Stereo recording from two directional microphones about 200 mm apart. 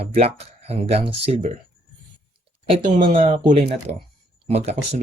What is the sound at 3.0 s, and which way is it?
Speech, 30° right (ahead or behind).